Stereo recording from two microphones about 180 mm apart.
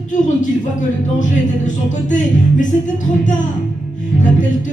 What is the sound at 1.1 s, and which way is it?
Speech, 45° left (ahead or behind).